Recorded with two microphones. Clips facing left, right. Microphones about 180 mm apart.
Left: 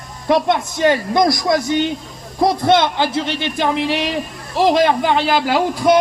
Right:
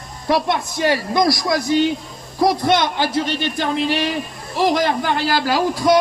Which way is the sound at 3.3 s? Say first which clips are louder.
Left 2 dB; 65° left (ahead or behind).